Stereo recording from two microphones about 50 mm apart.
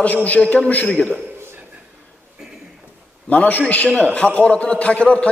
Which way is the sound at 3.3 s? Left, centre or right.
Left.